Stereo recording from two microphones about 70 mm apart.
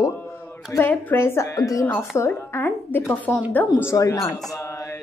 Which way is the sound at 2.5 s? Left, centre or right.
Left.